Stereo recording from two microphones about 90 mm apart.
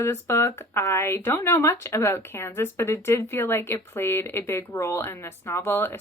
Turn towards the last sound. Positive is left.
turn(degrees=25)  # may be behind; listen again after turning